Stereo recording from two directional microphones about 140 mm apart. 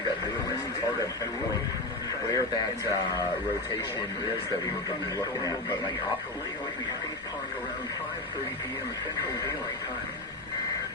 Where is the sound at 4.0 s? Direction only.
40° left (ahead or behind).